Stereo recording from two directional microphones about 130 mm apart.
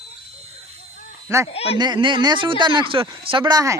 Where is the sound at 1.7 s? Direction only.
35° right (ahead or behind).